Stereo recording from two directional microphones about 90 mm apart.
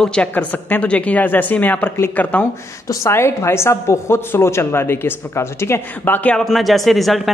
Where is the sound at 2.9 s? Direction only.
30° left (ahead or behind).